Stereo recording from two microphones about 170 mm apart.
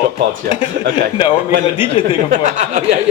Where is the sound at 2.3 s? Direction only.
45° right (ahead or behind).